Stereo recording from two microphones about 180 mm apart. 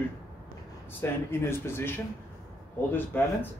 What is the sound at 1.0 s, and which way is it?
Speech, 15° left (ahead or behind).